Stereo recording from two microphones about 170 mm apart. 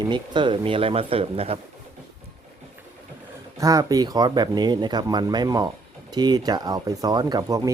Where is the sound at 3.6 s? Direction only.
20° right (ahead or behind).